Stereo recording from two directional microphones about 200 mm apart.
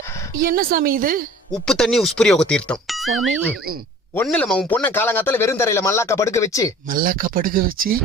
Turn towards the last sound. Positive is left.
turn(degrees=-45)  # may be behind; listen again after turning